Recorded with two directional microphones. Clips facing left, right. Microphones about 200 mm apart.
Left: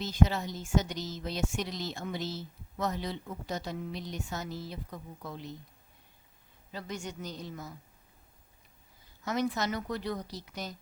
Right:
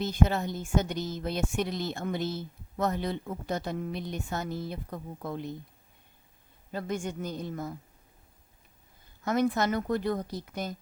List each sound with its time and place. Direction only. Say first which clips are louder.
0.0 s speech: right 2 dB; 55° right (ahead or behind)
6.7 s a woman's voice: right 6 dB; 50° right (ahead or behind)
9.2 s a woman's voice: right 5 dB; 55° right (ahead or behind)